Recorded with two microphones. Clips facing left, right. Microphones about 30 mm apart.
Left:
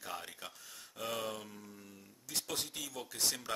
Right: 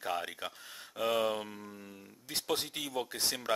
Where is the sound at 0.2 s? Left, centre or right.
Right.